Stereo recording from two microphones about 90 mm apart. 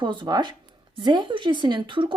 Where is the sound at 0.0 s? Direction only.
60° right (ahead or behind).